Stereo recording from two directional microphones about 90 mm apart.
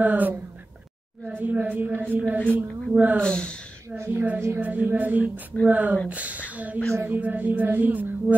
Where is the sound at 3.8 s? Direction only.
30° right (ahead or behind).